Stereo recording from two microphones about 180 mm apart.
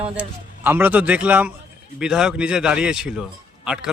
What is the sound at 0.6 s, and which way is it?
A man's voice, 10° right (ahead or behind).